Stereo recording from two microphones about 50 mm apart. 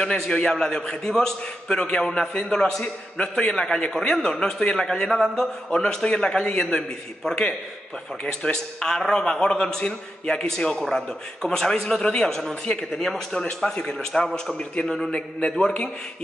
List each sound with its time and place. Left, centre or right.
0.0 s a man's voice: centre